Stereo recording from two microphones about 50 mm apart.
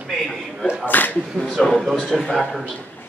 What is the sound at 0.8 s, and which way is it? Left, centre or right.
Speech, left.